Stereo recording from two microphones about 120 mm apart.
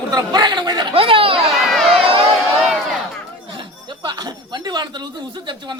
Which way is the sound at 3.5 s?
45° right (ahead or behind).